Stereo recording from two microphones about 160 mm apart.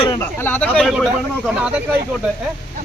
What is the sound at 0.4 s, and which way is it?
Speech, 10° left (ahead or behind).